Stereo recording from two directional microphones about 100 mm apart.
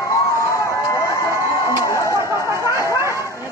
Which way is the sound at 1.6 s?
35° left (ahead or behind).